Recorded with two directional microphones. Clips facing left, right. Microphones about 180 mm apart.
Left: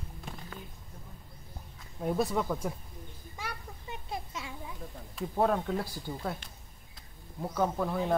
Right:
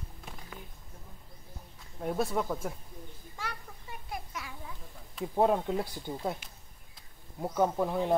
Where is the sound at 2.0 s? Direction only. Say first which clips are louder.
Left 1 dB; centre (ahead or behind).